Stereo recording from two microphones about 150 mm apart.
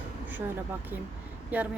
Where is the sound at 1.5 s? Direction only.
10° right (ahead or behind).